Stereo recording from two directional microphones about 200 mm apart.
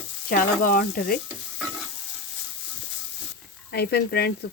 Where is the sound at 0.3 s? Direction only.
45° left (ahead or behind).